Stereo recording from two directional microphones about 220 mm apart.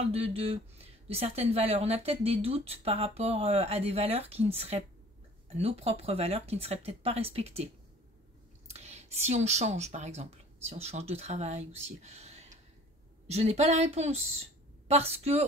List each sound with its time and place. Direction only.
0.1 s speech: 25° right (ahead or behind)